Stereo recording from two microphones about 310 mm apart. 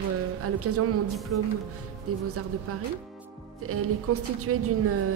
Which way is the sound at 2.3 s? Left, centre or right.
Right.